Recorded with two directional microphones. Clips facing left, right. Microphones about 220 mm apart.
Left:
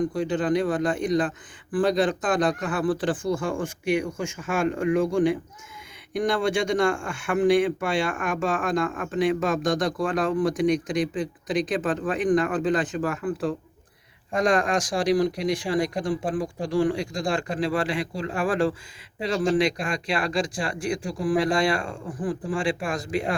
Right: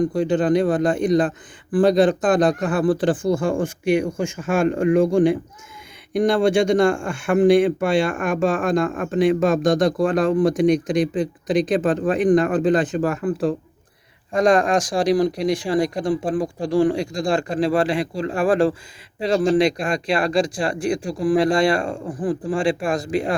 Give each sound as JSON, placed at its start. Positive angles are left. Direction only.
{"t": 0.1, "sound": "speech", "side_deg": -40}